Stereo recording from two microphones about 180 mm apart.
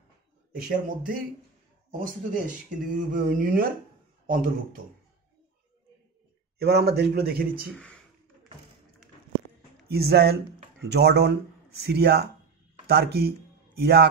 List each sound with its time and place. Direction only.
0.6 s speech: 50° right (ahead or behind)
6.6 s speech: 65° right (ahead or behind)
7.7 s speech: 5° left (ahead or behind)
9.8 s speech: 60° right (ahead or behind)